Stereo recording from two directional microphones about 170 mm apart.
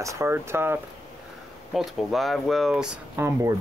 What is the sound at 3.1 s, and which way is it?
Speech, 15° right (ahead or behind).